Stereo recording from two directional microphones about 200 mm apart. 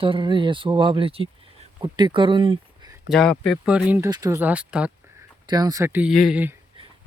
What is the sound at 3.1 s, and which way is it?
Speech, 5° left (ahead or behind).